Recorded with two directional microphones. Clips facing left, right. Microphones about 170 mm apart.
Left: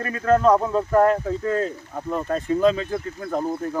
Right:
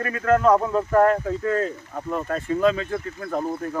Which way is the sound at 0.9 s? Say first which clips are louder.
Even; 15° left (ahead or behind).